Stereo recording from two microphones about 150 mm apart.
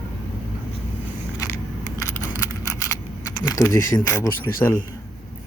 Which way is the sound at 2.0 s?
20° left (ahead or behind).